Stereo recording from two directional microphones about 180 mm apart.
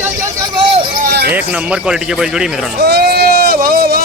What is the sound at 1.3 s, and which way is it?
Speech, 5° right (ahead or behind).